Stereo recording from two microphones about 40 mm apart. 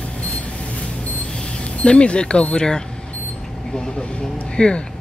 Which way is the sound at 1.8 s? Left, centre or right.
Left.